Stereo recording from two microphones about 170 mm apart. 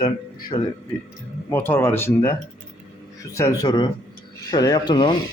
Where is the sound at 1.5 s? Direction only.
15° left (ahead or behind).